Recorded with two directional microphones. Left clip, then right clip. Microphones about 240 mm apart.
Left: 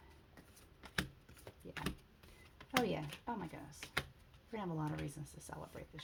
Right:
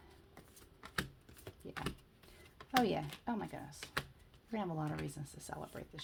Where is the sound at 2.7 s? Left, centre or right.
Right.